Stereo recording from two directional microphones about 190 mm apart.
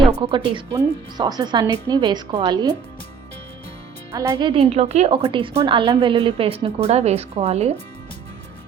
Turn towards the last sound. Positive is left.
turn(degrees=-35)  # may be behind; listen again after turning